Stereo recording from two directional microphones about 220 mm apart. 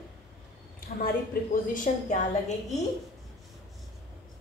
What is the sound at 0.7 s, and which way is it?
A woman's voice, 40° left (ahead or behind).